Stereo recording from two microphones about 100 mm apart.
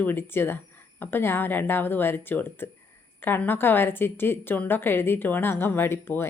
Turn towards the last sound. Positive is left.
turn(degrees=25)  # may be behind; listen again after turning